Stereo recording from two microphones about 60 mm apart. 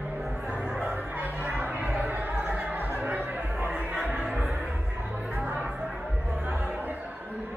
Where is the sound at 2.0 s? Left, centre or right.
Right.